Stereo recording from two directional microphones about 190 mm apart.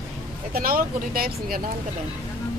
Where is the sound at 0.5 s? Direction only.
50° right (ahead or behind).